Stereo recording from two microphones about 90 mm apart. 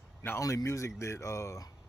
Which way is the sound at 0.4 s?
35° left (ahead or behind).